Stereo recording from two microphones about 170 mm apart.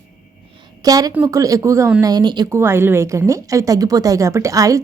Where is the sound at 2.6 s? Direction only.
15° right (ahead or behind).